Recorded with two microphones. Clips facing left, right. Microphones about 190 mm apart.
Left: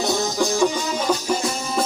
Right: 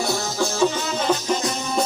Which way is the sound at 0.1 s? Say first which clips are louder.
Left 3 dB; 15° left (ahead or behind).